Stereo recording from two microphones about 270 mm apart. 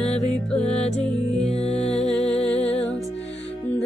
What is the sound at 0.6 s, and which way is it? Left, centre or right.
Music, left.